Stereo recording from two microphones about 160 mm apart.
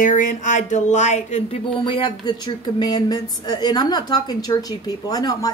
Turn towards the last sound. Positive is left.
turn(degrees=25)  # may be behind; listen again after turning